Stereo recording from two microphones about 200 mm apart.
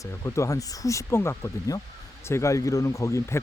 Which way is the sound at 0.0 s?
15° left (ahead or behind).